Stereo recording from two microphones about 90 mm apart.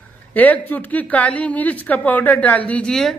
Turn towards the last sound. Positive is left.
turn(degrees=5)  # may be behind; listen again after turning